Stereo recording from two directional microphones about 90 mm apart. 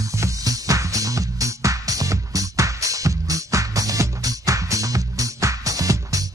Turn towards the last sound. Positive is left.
turn(degrees=-40)  # may be behind; listen again after turning